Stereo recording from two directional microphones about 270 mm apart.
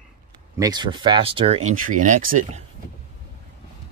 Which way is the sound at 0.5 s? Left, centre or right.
Centre.